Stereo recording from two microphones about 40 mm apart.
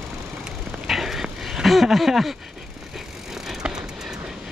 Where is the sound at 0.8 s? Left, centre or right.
Centre.